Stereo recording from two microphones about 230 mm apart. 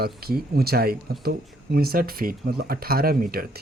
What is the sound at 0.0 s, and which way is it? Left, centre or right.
Speech, right.